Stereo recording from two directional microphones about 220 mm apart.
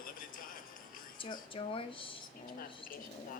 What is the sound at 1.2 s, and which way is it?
Speech, 25° left (ahead or behind).